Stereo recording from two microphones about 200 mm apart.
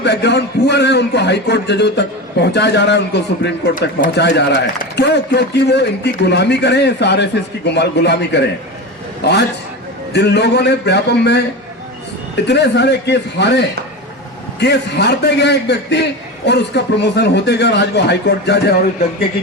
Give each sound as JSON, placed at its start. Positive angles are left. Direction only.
{"t": 0.0, "sound": "a man's voice", "side_deg": 60}
{"t": 3.8, "sound": "a man's voice", "side_deg": 50}
{"t": 12.5, "sound": "a man's voice", "side_deg": 60}